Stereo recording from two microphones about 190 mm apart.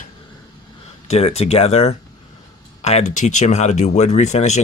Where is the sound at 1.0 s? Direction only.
35° left (ahead or behind).